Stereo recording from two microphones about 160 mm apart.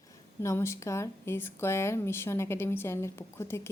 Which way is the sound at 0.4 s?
15° left (ahead or behind).